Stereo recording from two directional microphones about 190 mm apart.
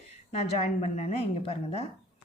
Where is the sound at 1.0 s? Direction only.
35° left (ahead or behind).